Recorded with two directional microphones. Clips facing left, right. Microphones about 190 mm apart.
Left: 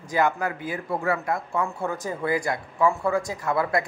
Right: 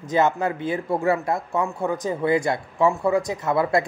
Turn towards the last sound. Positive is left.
turn(degrees=-25)  # may be behind; listen again after turning